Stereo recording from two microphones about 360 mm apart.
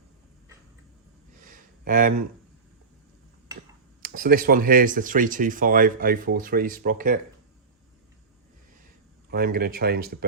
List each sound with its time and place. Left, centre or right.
1.5 s a sound: right
4.0 s speech: right
9.3 s speech: right